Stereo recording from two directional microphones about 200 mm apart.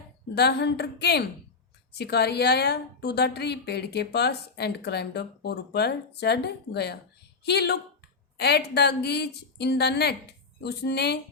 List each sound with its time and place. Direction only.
0.3 s a woman's voice: 55° left (ahead or behind)